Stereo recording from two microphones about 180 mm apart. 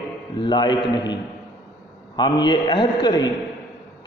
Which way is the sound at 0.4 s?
25° left (ahead or behind).